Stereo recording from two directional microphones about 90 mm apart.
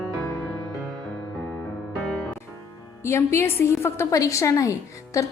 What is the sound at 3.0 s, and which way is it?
A woman's voice, 30° left (ahead or behind).